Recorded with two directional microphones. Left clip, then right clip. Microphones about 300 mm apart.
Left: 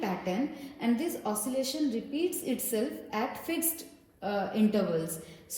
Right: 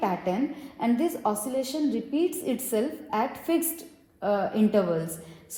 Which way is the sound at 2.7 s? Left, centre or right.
Centre.